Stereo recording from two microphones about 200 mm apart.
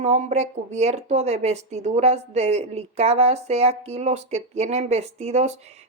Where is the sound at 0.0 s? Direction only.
35° right (ahead or behind).